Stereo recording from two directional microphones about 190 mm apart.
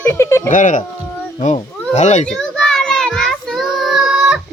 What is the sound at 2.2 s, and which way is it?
Child singing, 5° left (ahead or behind).